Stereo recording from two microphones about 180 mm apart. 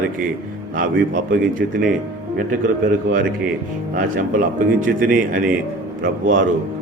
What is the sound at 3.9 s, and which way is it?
A man's voice, 50° right (ahead or behind).